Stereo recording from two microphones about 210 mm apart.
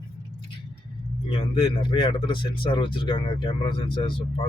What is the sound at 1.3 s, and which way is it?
Speech, 25° left (ahead or behind).